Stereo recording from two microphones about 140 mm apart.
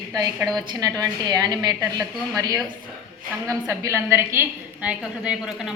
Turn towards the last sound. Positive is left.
turn(degrees=-5)  # may be behind; listen again after turning